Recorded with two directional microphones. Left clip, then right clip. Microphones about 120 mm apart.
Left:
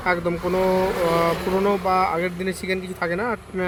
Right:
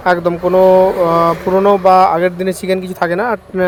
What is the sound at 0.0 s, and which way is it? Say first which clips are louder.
Speech: right 9 dB; 45° right (ahead or behind).